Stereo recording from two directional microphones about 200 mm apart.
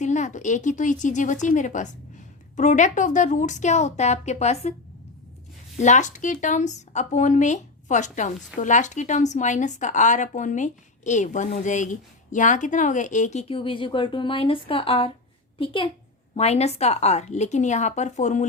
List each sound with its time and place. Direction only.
0.0 s speech: 35° left (ahead or behind)
5.8 s speech: 35° left (ahead or behind)
13.5 s a woman's voice: 25° left (ahead or behind)